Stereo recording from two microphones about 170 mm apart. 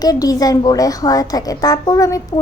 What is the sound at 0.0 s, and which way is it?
Speech, 20° left (ahead or behind).